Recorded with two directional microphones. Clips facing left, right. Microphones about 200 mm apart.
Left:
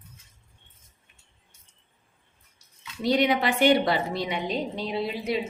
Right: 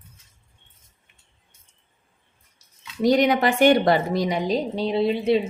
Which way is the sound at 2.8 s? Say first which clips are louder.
Right 5 dB; 45° right (ahead or behind).